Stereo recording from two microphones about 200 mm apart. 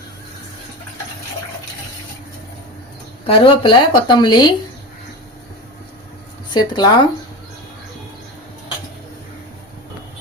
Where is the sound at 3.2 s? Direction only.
25° left (ahead or behind).